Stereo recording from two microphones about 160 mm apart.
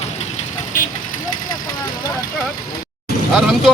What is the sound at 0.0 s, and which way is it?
Vehicle, 45° left (ahead or behind).